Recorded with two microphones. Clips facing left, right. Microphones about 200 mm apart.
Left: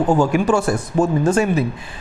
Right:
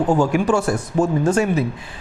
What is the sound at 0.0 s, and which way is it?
A man's voice, 35° left (ahead or behind).